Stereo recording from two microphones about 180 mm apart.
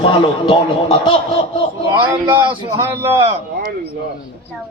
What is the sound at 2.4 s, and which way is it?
Speech, 25° right (ahead or behind).